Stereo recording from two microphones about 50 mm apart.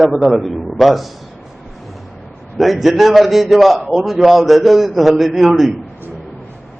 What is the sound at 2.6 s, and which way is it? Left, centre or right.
A man's voice, centre.